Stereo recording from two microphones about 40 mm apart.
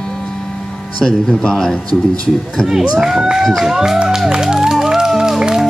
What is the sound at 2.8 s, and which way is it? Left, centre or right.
Speech, centre.